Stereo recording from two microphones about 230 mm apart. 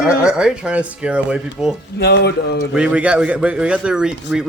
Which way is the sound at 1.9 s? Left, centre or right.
Left.